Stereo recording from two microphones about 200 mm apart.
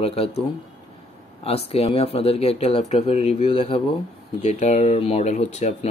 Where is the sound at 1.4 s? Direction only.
30° left (ahead or behind).